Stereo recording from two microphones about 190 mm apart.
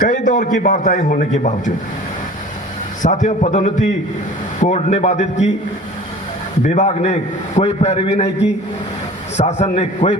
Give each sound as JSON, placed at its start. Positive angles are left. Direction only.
{"t": 0.0, "sound": "a man's voice", "side_deg": 45}
{"t": 3.0, "sound": "a man's voice", "side_deg": 40}
{"t": 6.7, "sound": "a man's voice", "side_deg": 35}
{"t": 9.4, "sound": "a man's voice", "side_deg": 35}